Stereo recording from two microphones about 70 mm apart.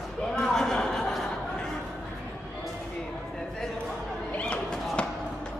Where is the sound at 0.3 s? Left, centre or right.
Centre.